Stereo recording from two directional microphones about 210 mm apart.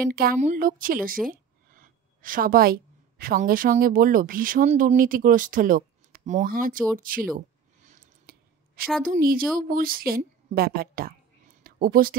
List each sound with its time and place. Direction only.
0.1 s a woman's voice: 45° right (ahead or behind)
7.8 s clicking: 40° right (ahead or behind)
9.0 s a woman's voice: 40° right (ahead or behind)